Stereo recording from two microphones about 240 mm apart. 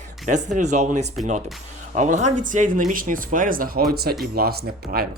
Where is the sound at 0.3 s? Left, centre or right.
Right.